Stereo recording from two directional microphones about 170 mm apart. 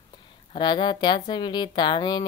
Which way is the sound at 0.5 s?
25° left (ahead or behind).